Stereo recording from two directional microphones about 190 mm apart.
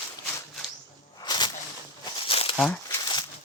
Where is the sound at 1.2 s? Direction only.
20° left (ahead or behind).